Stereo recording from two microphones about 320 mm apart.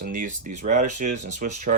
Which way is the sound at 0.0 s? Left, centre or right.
Right.